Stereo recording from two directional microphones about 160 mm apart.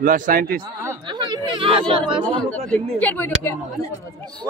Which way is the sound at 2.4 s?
5° left (ahead or behind).